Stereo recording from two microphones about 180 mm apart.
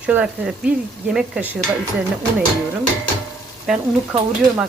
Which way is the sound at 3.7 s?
5° right (ahead or behind).